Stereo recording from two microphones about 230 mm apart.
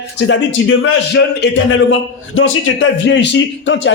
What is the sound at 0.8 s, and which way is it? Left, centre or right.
A man's voice, left.